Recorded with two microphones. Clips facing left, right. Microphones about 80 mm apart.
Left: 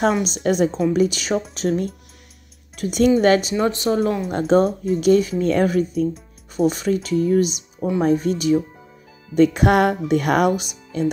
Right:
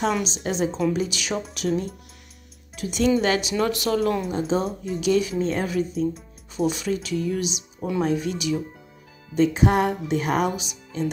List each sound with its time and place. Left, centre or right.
0.2 s speech: left
2.7 s speech: left
3.5 s speech: left
4.3 s speech: left
5.4 s speech: left
9.3 s speech: left